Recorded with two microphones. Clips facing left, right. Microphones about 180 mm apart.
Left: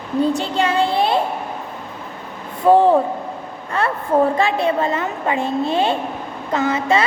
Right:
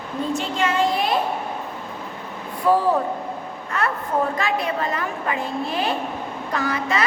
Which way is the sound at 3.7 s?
30° left (ahead or behind).